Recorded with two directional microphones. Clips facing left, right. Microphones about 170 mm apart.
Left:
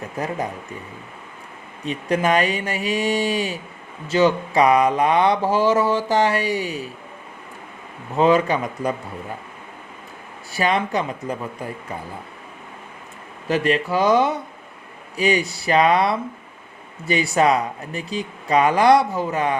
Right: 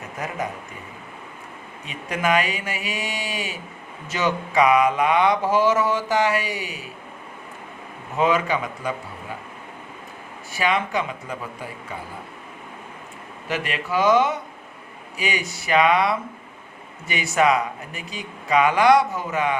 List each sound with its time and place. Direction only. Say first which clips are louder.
1.8 s mantra: left 5 dB; 35° left (ahead or behind)
8.2 s mantra: left 4 dB; 35° left (ahead or behind)
10.5 s mantra: left 2 dB; 35° left (ahead or behind)
13.5 s mantra: left 6 dB; 35° left (ahead or behind)